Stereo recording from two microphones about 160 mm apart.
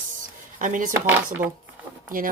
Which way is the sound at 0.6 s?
55° right (ahead or behind).